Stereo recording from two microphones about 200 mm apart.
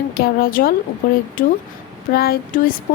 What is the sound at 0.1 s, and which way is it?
Speech, 50° left (ahead or behind).